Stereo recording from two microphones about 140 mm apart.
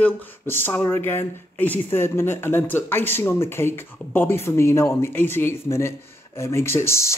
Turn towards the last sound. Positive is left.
turn(degrees=20)  # may be behind; listen again after turning